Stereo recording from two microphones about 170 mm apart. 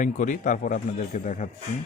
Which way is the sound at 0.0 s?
50° left (ahead or behind).